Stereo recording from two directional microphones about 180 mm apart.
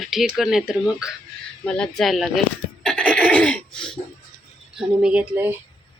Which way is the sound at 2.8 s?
5° left (ahead or behind).